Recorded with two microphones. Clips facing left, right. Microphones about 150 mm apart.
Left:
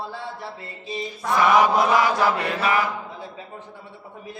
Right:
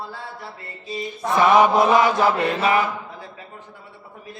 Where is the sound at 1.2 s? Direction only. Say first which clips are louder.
Right 2 dB; 25° right (ahead or behind).